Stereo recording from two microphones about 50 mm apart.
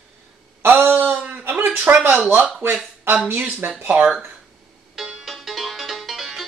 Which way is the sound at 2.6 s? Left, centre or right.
Right.